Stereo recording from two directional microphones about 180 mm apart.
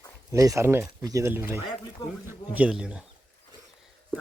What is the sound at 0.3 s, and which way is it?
Speech, 20° right (ahead or behind).